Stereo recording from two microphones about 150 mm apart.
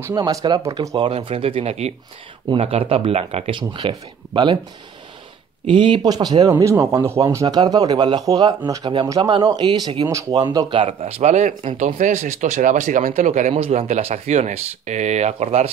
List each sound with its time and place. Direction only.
0.0 s a man's voice: 25° right (ahead or behind)
0.9 s speech: 35° right (ahead or behind)
5.7 s a man's voice: 35° right (ahead or behind)